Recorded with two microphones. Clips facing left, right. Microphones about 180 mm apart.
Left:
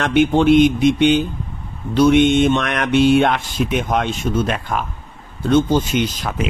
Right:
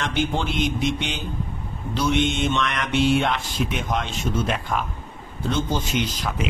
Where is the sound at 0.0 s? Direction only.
60° left (ahead or behind).